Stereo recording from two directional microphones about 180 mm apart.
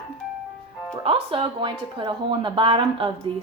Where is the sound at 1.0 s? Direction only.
30° right (ahead or behind).